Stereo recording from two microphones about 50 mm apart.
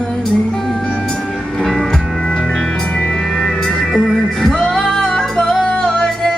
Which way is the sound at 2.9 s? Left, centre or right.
Left.